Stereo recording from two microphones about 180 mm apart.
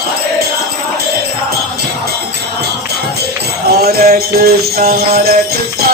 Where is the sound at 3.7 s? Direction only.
60° right (ahead or behind).